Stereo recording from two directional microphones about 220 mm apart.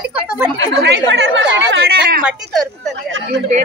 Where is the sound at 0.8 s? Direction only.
50° right (ahead or behind).